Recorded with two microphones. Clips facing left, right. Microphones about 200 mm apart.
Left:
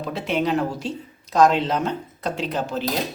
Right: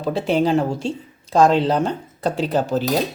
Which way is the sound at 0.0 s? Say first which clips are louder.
Right 5 dB; 30° right (ahead or behind).